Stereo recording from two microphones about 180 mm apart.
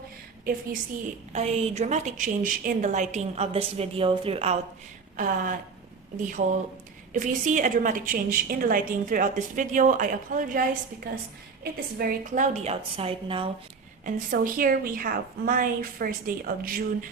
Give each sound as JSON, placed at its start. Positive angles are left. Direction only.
{"t": 1.3, "sound": "a woman's voice", "side_deg": -35}
{"t": 5.1, "sound": "a woman's voice", "side_deg": -45}
{"t": 7.1, "sound": "a woman's voice", "side_deg": -45}
{"t": 14.0, "sound": "a woman's voice", "side_deg": -50}